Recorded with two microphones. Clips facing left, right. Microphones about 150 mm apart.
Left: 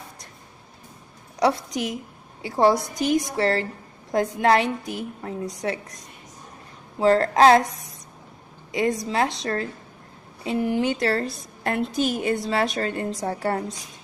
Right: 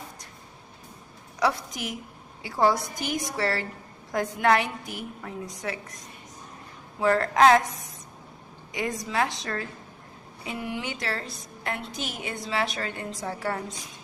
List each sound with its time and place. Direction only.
1.4 s a woman's voice: 25° left (ahead or behind)
7.0 s a woman's voice: 30° left (ahead or behind)
8.7 s a woman's voice: 30° left (ahead or behind)